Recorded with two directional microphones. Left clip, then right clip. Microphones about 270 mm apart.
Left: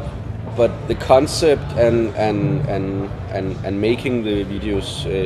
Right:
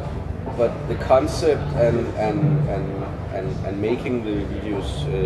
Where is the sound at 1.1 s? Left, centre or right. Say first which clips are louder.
Left 4 dB; left.